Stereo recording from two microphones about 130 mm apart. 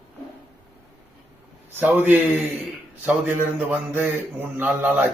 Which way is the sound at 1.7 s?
15° right (ahead or behind).